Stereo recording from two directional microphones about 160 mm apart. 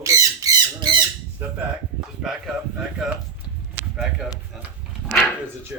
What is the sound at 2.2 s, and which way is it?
Speech, centre (ahead or behind).